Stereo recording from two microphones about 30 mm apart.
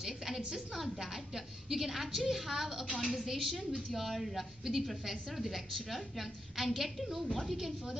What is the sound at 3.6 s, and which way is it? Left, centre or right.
Speech, left.